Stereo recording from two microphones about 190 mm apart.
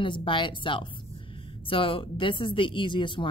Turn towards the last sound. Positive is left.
turn(degrees=25)  # may be behind; listen again after turning